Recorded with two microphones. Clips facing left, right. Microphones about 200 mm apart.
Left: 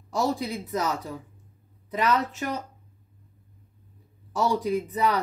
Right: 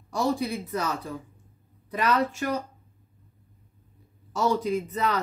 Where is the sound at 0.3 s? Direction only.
15° left (ahead or behind).